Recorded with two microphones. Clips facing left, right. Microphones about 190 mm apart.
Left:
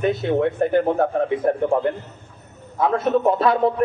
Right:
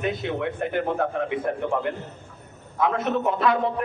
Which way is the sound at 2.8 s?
35° left (ahead or behind).